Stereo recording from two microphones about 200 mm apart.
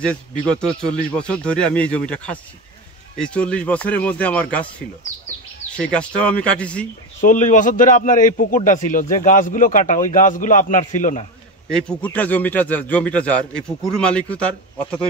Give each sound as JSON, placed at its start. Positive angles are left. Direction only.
{"t": 0.0, "sound": "a man's voice", "side_deg": 5}
{"t": 7.2, "sound": "a man's voice", "side_deg": 40}
{"t": 11.7, "sound": "a man's voice", "side_deg": 5}